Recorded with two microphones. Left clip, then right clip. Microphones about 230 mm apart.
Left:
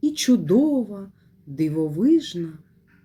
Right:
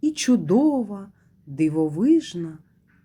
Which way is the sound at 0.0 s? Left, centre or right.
Centre.